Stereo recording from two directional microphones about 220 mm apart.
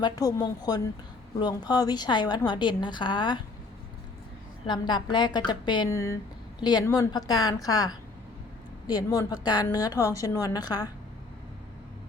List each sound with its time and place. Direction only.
0.0 s a woman's voice: 15° left (ahead or behind)
4.6 s a woman's voice: 20° left (ahead or behind)
8.9 s a woman's voice: 15° left (ahead or behind)